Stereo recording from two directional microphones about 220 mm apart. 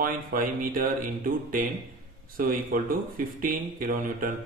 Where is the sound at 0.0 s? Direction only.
40° right (ahead or behind).